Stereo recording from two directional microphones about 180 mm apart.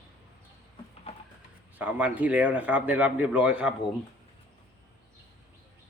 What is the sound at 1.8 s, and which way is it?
A man's voice, 10° right (ahead or behind).